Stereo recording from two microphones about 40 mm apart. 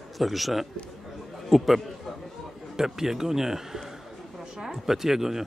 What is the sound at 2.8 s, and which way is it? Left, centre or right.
A man's voice, centre.